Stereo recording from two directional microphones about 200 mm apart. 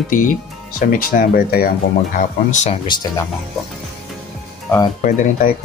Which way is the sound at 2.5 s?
35° left (ahead or behind).